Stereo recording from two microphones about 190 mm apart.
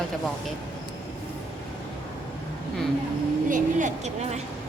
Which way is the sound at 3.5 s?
40° right (ahead or behind).